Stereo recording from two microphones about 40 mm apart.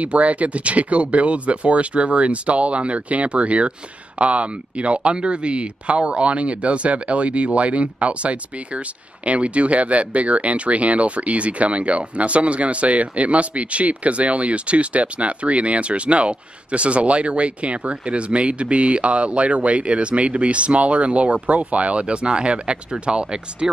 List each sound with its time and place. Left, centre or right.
0.0 s speech: right